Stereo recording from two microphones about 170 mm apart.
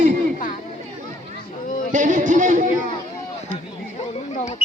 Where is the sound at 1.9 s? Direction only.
50° right (ahead or behind).